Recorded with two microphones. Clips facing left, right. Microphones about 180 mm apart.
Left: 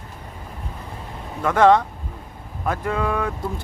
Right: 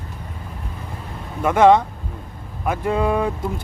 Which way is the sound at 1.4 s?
20° right (ahead or behind).